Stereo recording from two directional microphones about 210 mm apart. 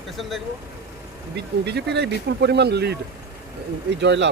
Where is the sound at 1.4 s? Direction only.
50° right (ahead or behind).